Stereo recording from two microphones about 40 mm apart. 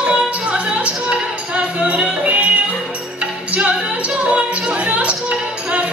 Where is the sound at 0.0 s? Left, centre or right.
Right.